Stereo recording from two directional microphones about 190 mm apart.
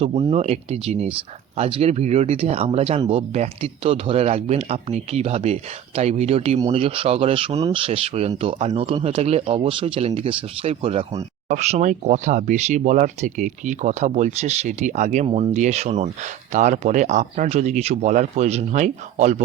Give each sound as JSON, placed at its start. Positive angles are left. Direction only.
{"t": 0.0, "sound": "speech", "side_deg": -30}